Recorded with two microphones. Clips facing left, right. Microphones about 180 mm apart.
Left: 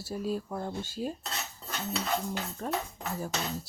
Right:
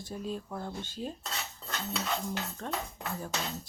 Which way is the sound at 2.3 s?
10° left (ahead or behind).